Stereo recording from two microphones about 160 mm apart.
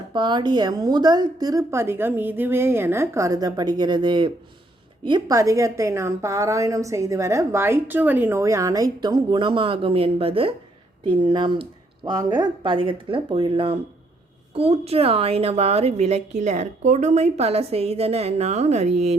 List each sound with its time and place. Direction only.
0.1 s a woman's voice: 30° right (ahead or behind)